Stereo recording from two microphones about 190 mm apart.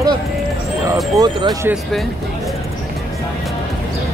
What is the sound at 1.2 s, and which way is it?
Speech, 20° right (ahead or behind).